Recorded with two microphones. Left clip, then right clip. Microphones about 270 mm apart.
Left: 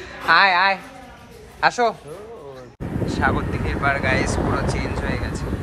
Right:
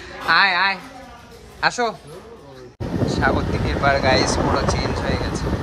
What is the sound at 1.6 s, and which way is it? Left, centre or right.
Speech, centre.